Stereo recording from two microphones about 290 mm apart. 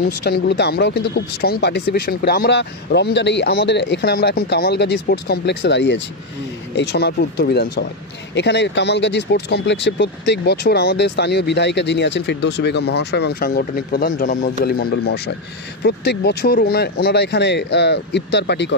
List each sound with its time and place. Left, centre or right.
0.0 s speech: left